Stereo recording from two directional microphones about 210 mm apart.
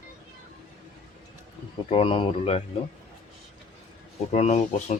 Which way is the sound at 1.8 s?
25° left (ahead or behind).